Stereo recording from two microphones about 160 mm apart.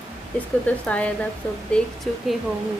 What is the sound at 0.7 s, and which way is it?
Speech, 10° left (ahead or behind).